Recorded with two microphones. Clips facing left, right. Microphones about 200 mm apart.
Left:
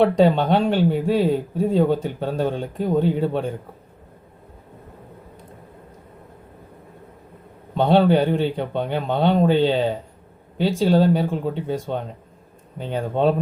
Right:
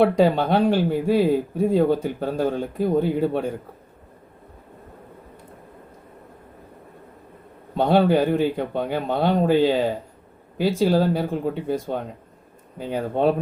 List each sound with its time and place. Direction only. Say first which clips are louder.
0.0 s speech: left 1 dB; 10° right (ahead or behind)
7.8 s speech: left 1 dB; 10° right (ahead or behind)